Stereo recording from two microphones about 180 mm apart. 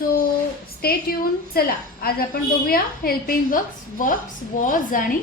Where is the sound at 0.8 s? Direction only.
55° left (ahead or behind).